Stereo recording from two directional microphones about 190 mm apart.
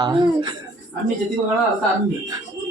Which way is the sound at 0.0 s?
25° right (ahead or behind).